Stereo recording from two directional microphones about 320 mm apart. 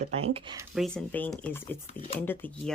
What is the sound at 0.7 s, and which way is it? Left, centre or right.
Speech, centre.